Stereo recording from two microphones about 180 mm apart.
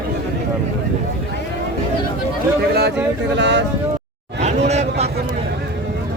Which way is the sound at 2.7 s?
65° right (ahead or behind).